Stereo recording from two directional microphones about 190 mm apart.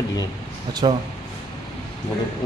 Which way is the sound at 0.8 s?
25° right (ahead or behind).